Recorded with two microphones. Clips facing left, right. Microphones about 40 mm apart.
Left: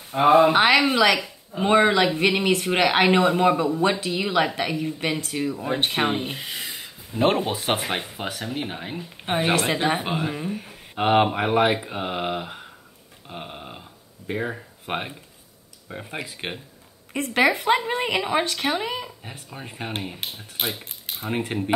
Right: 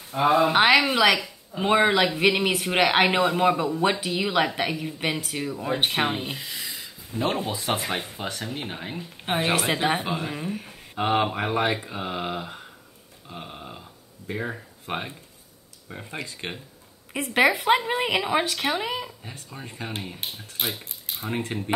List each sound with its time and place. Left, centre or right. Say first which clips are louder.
0.1 s speech: left 4 dB; left
0.5 s speech: left 1 dB; centre
6.2 s a sound: left 2 dB; left
7.1 s speech: left 6 dB; left
7.5 s speech: left 2 dB; left
8.0 s speech: left 1 dB; centre
10.0 s speech: left 3 dB; centre
10.3 s speech: left 1 dB; centre
11.0 s speech: left 4 dB; left
13.3 s a sound: left 2 dB; centre
14.9 s speech: left 2 dB; centre
17.1 s speech: even; centre
19.3 s speech: left 2 dB; centre
21.1 s speech: left 2 dB; centre